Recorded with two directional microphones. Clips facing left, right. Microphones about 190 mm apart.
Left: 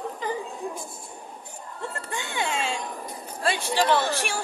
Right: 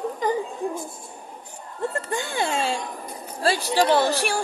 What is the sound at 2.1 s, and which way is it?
Speech, 35° right (ahead or behind).